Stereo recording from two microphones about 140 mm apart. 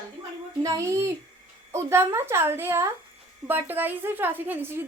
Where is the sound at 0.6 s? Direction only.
20° right (ahead or behind).